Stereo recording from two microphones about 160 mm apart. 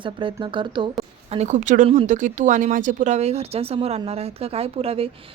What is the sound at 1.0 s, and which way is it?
Speech, 40° right (ahead or behind).